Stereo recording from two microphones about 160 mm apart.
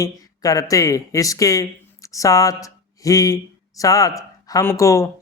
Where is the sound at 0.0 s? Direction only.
20° left (ahead or behind).